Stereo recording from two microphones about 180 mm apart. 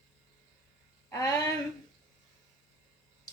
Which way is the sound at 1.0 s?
20° left (ahead or behind).